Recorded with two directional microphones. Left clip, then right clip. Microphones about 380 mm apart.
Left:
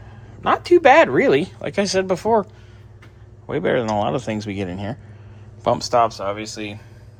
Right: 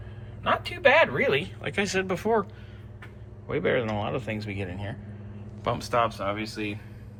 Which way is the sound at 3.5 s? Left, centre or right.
Centre.